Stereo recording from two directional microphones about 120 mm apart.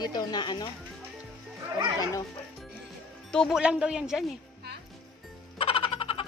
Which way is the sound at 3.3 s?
Centre (ahead or behind).